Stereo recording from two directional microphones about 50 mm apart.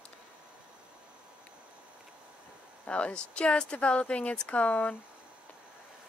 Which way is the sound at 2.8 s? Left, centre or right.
Left.